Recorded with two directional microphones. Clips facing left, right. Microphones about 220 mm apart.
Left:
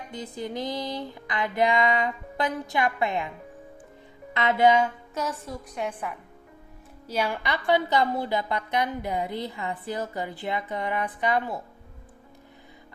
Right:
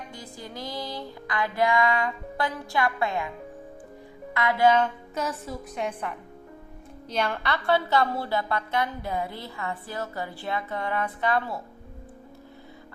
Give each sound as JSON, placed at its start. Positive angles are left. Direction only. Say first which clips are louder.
{"t": 0.1, "sound": "music", "louder": "left 7 dB", "side_deg": 20}
{"t": 4.4, "sound": "music", "louder": "left 1 dB", "side_deg": 20}
{"t": 5.1, "sound": "a woman's voice", "louder": "right 1 dB", "side_deg": 0}